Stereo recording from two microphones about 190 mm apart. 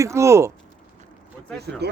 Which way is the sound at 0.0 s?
15° right (ahead or behind).